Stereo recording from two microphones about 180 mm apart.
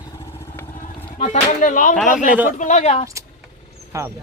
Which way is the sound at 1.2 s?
40° left (ahead or behind).